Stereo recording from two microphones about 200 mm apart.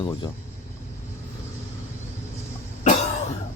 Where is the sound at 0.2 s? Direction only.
20° left (ahead or behind).